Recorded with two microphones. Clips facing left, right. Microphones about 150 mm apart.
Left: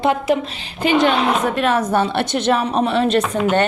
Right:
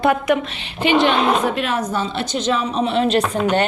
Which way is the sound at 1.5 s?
55° left (ahead or behind).